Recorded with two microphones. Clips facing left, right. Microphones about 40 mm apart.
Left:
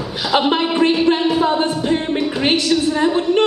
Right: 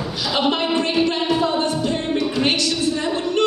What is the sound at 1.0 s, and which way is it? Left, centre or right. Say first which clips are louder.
Music: left 4 dB; centre.